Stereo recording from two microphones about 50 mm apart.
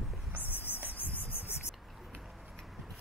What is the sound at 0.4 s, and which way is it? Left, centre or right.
Insect, left.